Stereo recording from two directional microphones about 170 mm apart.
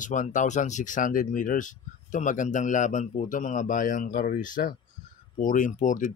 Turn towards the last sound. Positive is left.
turn(degrees=50)  # may be behind; listen again after turning